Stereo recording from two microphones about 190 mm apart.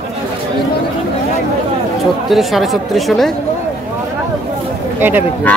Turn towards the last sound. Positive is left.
turn(degrees=-10)  # may be behind; listen again after turning